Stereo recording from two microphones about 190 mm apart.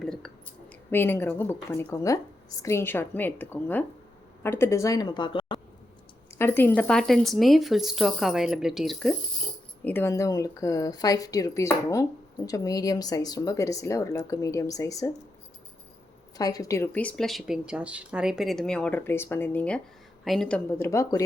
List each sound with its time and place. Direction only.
0.0 s a sound: 5° left (ahead or behind)
0.9 s a woman's voice: 10° left (ahead or behind)
6.4 s speech: 10° left (ahead or behind)
9.8 s a woman's voice: 10° left (ahead or behind)
16.4 s speech: 20° left (ahead or behind); by 20.6 s centre (ahead or behind)
20.7 s a woman's voice: 15° left (ahead or behind)